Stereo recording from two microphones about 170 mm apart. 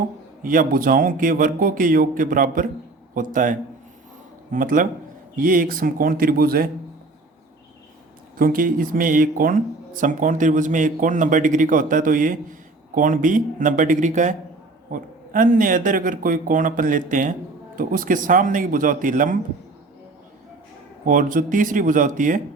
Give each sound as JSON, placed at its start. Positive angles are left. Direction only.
{"t": 0.4, "sound": "speech", "side_deg": -55}
{"t": 8.4, "sound": "speech", "side_deg": -55}
{"t": 21.0, "sound": "speech", "side_deg": -50}